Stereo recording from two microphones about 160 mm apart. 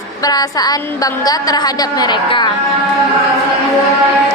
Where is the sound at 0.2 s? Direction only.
25° left (ahead or behind).